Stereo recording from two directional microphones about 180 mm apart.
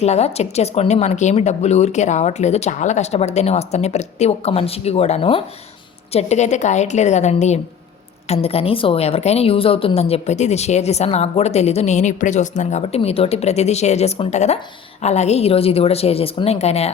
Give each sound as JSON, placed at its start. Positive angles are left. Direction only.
{"t": 0.0, "sound": "a woman's voice", "side_deg": 35}